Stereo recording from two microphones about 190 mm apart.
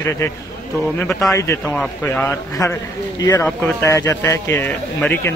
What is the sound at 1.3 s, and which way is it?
Speech, 15° left (ahead or behind).